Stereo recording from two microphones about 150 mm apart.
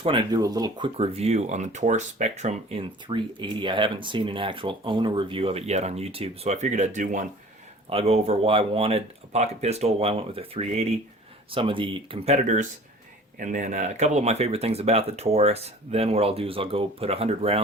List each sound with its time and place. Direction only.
0.0 s speech: 35° right (ahead or behind)
0.9 s speech: 45° right (ahead or behind)
3.1 s speech: 30° right (ahead or behind); by 7.3 s 55° right (ahead or behind)
7.9 s speech: 40° right (ahead or behind)